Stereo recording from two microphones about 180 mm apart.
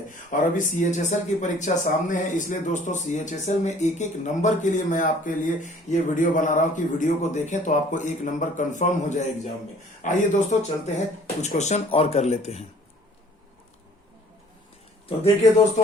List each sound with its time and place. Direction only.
0.1 s speech: 45° left (ahead or behind)